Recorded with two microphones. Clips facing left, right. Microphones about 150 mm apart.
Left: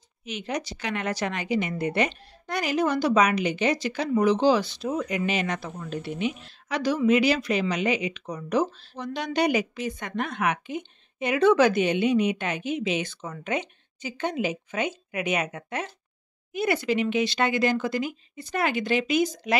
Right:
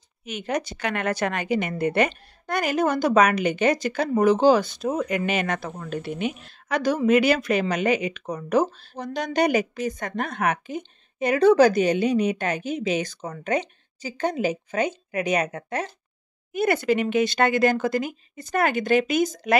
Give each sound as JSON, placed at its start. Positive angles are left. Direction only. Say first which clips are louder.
{"t": 0.2, "sound": "speech", "louder": "right 3 dB", "side_deg": -50}
{"t": 16.5, "sound": "speech", "louder": "right 3 dB", "side_deg": -50}